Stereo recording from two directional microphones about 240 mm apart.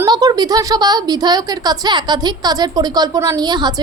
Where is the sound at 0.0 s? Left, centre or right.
Centre.